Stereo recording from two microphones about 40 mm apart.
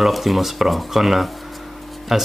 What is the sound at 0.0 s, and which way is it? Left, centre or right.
Speech, centre.